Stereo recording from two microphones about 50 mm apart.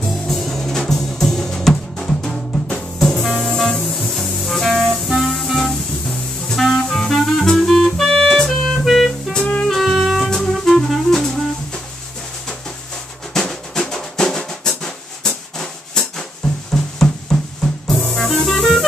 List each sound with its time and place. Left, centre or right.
0.0 s music: centre
9.4 s music: centre
9.7 s music: centre
13.3 s drum: centre
14.5 s music: centre